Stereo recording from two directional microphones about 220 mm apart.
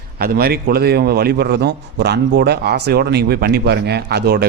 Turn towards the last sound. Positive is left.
turn(degrees=-50)  # may be behind; listen again after turning